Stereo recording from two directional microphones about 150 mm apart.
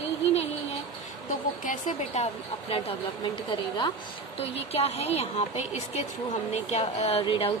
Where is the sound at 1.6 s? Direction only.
55° left (ahead or behind).